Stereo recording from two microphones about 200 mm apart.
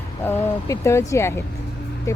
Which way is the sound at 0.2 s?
10° left (ahead or behind).